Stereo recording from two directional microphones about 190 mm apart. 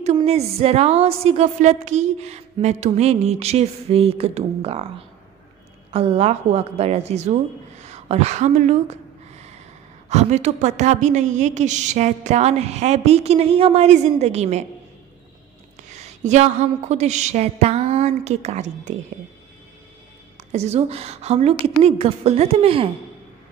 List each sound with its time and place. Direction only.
0.0 s a woman's voice: 35° right (ahead or behind)
10.0 s a woman's voice: 35° right (ahead or behind)
15.9 s a woman's voice: 35° right (ahead or behind)
20.3 s a woman's voice: 35° right (ahead or behind)